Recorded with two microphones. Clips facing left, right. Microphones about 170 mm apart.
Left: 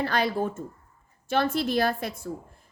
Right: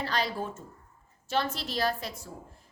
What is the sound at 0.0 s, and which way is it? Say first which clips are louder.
A woman's voice: left 6 dB; 55° left (ahead or behind).